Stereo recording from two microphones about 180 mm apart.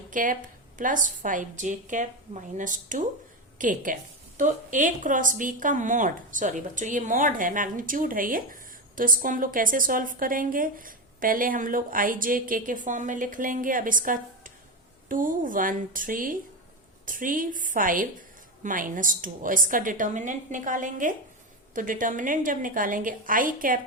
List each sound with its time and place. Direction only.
0.1 s a woman's voice: 45° right (ahead or behind)